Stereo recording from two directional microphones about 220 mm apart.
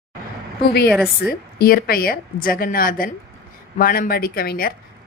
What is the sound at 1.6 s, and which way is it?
A woman's voice, 45° left (ahead or behind).